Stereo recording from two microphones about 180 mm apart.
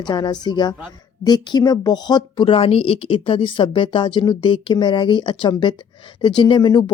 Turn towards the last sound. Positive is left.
turn(degrees=25)  # may be behind; listen again after turning